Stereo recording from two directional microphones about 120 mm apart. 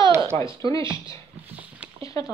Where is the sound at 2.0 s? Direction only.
30° left (ahead or behind).